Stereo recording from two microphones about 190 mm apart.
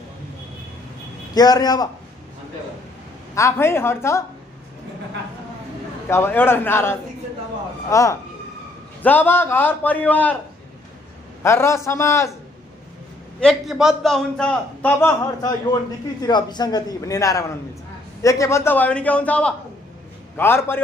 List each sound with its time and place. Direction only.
1.3 s a man's voice: 20° left (ahead or behind)
3.3 s a man's voice: 15° left (ahead or behind)
6.0 s a man's voice: 15° left (ahead or behind)
11.4 s a man's voice: 15° left (ahead or behind)
13.4 s a man's voice: centre (ahead or behind)